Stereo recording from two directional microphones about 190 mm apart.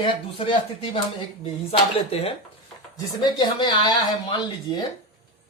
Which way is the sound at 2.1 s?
30° left (ahead or behind).